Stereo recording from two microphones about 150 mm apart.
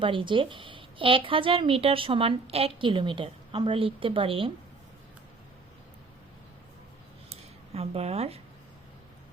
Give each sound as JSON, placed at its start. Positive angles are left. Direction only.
{"t": 0.0, "sound": "a woman's voice", "side_deg": -35}
{"t": 7.3, "sound": "dishes", "side_deg": -40}